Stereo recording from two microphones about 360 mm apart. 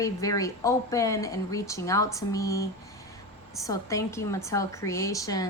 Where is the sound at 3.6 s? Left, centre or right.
Centre.